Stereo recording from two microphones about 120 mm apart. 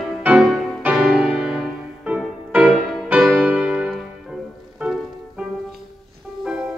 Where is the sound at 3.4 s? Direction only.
10° right (ahead or behind).